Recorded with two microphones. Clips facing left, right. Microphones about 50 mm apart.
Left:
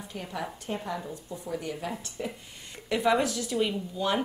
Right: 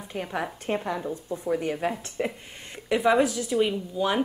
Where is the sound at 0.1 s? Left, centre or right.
Right.